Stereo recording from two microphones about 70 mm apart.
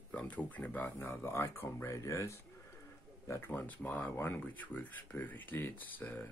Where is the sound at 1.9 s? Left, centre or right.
Left.